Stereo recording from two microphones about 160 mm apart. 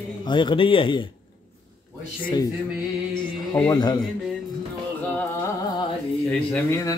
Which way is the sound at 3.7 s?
25° left (ahead or behind).